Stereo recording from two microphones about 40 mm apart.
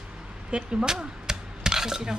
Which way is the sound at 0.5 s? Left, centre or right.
Centre.